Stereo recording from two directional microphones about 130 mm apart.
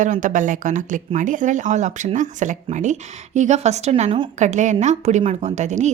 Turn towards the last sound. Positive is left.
turn(degrees=-65)  # may be behind; listen again after turning